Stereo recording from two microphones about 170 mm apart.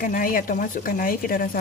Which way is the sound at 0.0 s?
55° left (ahead or behind).